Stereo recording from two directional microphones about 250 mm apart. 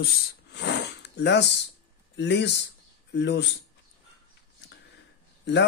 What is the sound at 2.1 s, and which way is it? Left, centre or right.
Speech, left.